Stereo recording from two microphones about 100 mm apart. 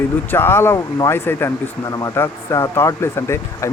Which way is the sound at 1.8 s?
35° left (ahead or behind).